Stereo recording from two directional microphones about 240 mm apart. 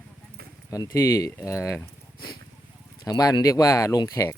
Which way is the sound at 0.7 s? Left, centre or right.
Centre.